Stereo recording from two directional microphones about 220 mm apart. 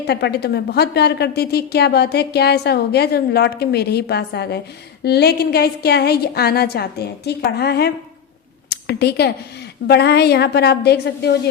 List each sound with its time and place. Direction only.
0.1 s a woman's voice: 45° left (ahead or behind)